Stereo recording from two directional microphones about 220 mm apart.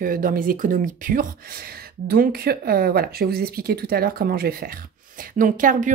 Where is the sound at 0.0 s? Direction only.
40° right (ahead or behind).